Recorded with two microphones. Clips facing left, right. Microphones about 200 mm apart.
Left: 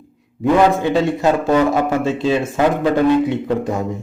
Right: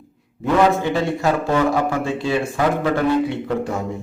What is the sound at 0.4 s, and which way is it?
A man's voice, 15° left (ahead or behind).